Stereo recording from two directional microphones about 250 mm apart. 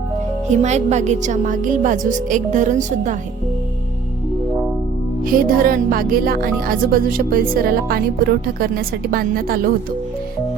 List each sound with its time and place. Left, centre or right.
0.4 s speech: right
5.2 s speech: right